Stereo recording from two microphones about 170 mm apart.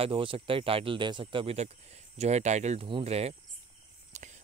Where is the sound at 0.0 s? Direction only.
30° right (ahead or behind).